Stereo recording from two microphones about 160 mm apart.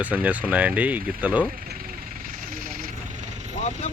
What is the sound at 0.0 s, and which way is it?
Speech, 10° right (ahead or behind).